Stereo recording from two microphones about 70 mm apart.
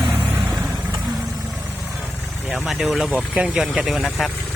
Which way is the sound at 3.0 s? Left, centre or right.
Centre.